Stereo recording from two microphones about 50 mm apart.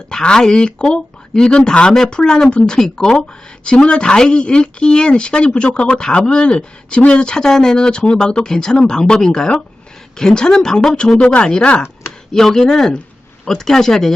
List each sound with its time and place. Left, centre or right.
0.1 s a woman's voice: centre
12.3 s speech: centre